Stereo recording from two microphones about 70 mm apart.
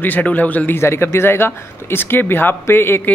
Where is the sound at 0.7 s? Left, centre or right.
Left.